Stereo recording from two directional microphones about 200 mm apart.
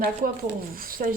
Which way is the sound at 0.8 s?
45° right (ahead or behind).